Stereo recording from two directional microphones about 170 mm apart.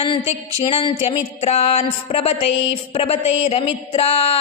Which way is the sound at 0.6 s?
35° left (ahead or behind).